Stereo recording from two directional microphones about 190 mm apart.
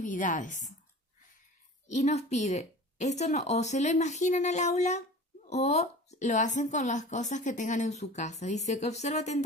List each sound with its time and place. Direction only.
0.0 s a woman's voice: 45° left (ahead or behind)
1.9 s speech: 35° left (ahead or behind)